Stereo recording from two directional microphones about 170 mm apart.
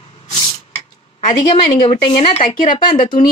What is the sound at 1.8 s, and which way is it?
Speech, 35° left (ahead or behind).